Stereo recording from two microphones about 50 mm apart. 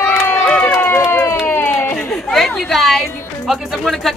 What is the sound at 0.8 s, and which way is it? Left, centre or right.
Run, left.